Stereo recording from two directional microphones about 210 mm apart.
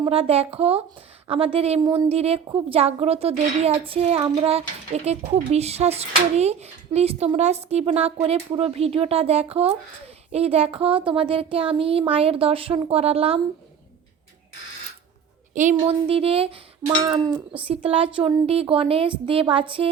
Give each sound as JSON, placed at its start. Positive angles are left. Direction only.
{"t": 0.0, "sound": "a child's voice", "side_deg": -25}
{"t": 15.7, "sound": "a child's voice", "side_deg": -25}